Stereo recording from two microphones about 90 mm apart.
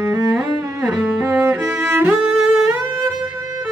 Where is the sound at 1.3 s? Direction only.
20° right (ahead or behind).